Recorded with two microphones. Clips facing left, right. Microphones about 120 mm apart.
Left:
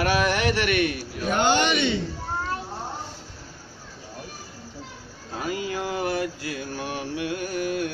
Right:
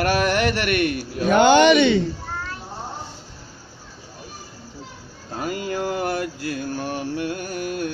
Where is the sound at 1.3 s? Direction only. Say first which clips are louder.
Right 8 dB; 75° right (ahead or behind).